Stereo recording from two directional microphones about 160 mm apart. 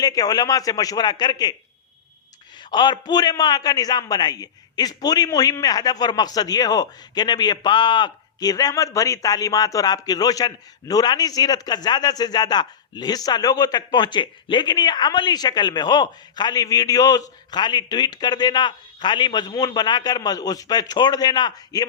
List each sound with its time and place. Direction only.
0.0 s a man's voice: 25° left (ahead or behind)
2.6 s a man's voice: 25° left (ahead or behind)